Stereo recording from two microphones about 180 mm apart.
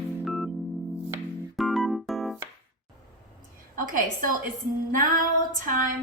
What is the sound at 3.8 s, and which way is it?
Speech, 50° right (ahead or behind).